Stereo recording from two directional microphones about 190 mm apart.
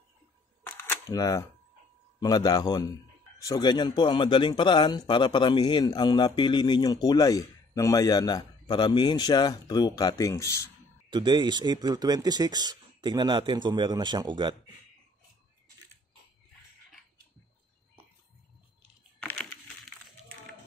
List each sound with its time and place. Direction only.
0.7 s camera: 10° left (ahead or behind)
2.1 s speech: 20° left (ahead or behind)
11.1 s speech: 25° right (ahead or behind)